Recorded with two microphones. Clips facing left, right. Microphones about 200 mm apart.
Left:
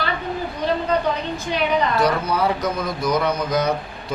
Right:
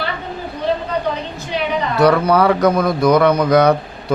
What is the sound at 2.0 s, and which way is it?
A man's voice, 65° right (ahead or behind).